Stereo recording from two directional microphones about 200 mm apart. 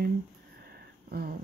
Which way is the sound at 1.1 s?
50° right (ahead or behind).